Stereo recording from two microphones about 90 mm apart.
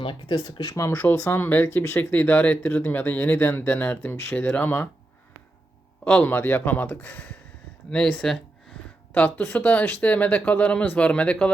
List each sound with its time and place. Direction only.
0.0 s speech: 65° left (ahead or behind)
0.8 s speech: 30° left (ahead or behind)
6.2 s speech: 20° left (ahead or behind)
9.4 s speech: 20° left (ahead or behind)